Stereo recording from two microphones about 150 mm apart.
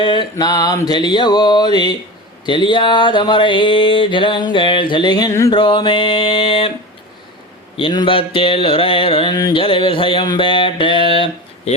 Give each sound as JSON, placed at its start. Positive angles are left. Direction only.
{"t": 0.0, "sound": "mantra", "side_deg": 30}
{"t": 5.5, "sound": "mantra", "side_deg": 35}
{"t": 7.8, "sound": "mantra", "side_deg": 35}